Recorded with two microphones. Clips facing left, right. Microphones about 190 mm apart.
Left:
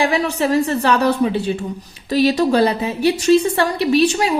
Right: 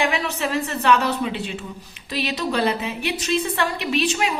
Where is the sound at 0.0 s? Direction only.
35° left (ahead or behind).